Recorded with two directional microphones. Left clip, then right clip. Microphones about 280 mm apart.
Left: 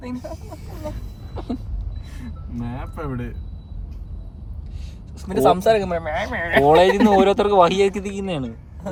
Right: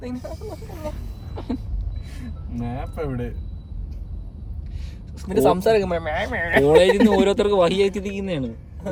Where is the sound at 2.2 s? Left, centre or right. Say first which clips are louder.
Even; centre.